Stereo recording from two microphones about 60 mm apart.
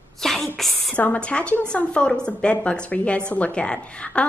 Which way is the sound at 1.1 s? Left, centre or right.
Centre.